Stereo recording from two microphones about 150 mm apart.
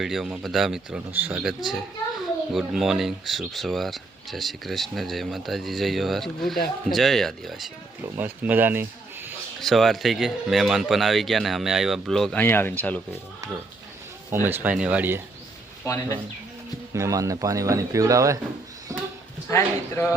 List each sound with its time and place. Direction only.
0.0 s speech: centre (ahead or behind)
8.1 s speech: 10° right (ahead or behind)
9.6 s speech: centre (ahead or behind)
14.4 s speech: 15° right (ahead or behind)
15.8 s speech: 20° left (ahead or behind)
16.9 s speech: 20° right (ahead or behind)
18.9 s a sound: 20° right (ahead or behind)
19.5 s speech: 20° left (ahead or behind)